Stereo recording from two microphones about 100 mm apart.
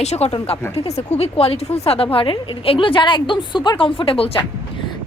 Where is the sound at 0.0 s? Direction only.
90° left; by 4.4 s 65° left (ahead or behind).